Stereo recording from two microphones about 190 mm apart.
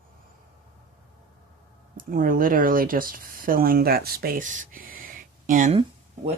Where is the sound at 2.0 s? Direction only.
45° right (ahead or behind).